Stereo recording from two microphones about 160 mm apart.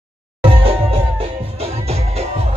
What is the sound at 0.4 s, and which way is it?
Music, 35° right (ahead or behind).